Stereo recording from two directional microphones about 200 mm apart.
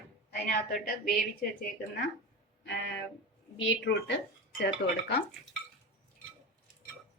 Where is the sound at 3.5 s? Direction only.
60° left (ahead or behind).